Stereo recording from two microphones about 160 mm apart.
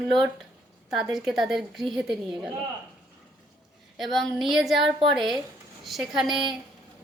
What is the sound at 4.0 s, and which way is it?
Speech, centre (ahead or behind).